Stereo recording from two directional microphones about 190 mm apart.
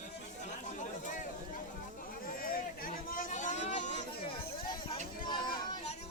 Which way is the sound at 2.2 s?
50° left (ahead or behind).